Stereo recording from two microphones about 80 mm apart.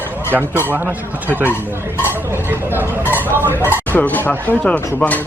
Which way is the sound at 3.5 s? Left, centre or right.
Left.